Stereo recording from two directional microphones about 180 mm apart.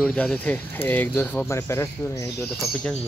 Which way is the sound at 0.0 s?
5° left (ahead or behind).